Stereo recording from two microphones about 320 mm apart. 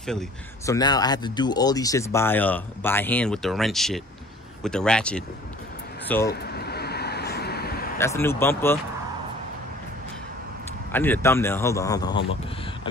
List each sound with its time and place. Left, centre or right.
0.0 s speech: centre
0.7 s speech: centre
6.2 s a sound: left
8.0 s speech: centre
10.9 s speech: centre